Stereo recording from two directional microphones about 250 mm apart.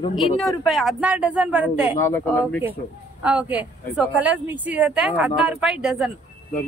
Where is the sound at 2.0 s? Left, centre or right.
Centre.